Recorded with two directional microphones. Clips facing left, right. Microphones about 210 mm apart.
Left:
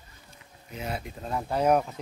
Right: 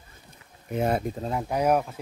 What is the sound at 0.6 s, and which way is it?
Speech, 50° right (ahead or behind).